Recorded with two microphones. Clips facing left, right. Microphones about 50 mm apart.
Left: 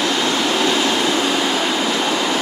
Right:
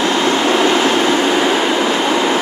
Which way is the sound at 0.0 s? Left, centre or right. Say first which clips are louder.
Right 4 dB; right.